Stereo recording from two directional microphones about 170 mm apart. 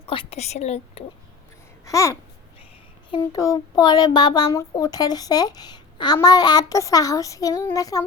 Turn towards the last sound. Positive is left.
turn(degrees=20)  # may be behind; listen again after turning